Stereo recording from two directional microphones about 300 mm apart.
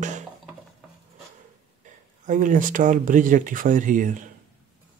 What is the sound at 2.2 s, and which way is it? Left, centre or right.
Speech, right.